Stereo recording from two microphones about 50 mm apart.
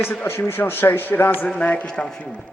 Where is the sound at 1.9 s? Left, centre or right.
Centre.